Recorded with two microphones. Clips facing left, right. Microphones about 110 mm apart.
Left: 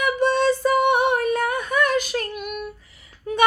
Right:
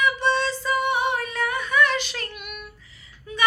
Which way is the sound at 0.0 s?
50° left (ahead or behind).